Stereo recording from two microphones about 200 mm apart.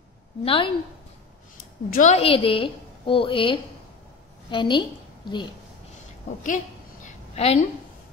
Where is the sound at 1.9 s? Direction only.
35° left (ahead or behind).